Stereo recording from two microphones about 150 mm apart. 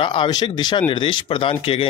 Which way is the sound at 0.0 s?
35° left (ahead or behind).